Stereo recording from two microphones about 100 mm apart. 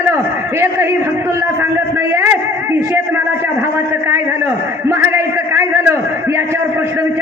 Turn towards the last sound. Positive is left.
turn(degrees=-25)  # may be behind; listen again after turning